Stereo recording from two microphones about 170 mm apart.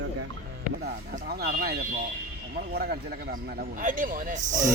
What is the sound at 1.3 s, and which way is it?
Speech, 65° right (ahead or behind).